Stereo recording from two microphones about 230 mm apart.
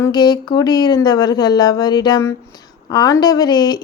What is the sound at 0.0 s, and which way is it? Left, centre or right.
A woman's voice, centre.